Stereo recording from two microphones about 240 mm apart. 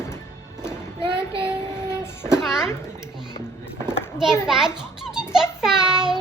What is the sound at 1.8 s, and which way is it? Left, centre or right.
Child singing, centre.